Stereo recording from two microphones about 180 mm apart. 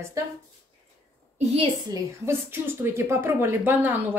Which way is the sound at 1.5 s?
30° right (ahead or behind).